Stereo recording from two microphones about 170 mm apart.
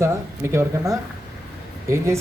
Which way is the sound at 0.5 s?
20° right (ahead or behind).